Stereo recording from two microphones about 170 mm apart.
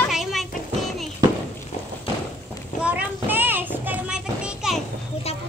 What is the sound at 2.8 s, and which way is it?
Child singing, 5° right (ahead or behind).